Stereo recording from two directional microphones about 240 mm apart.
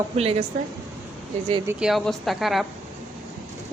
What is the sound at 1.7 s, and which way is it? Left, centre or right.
A woman's voice, centre.